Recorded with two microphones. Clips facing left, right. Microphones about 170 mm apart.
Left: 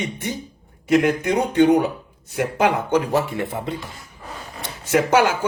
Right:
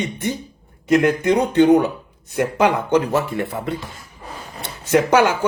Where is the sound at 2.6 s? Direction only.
15° left (ahead or behind).